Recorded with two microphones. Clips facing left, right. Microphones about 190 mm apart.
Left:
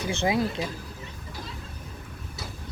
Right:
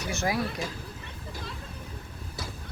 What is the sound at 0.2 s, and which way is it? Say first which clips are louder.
Speech: left 4 dB; 25° left (ahead or behind).